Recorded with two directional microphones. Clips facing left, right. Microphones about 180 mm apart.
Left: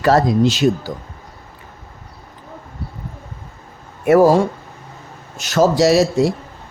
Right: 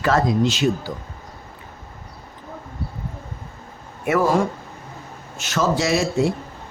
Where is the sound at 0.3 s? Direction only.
Centre (ahead or behind).